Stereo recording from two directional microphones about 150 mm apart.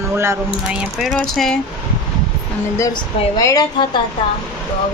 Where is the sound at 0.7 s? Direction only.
5° right (ahead or behind).